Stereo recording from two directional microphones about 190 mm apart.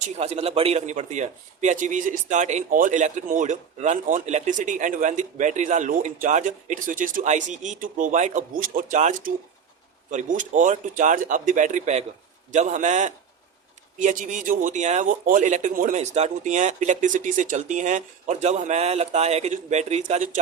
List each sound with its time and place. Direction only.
0.2 s a man's voice: 35° right (ahead or behind)